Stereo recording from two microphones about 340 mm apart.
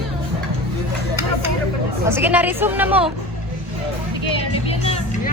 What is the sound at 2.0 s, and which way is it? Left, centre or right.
Speech, centre.